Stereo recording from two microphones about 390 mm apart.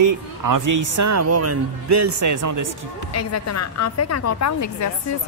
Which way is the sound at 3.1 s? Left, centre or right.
Left.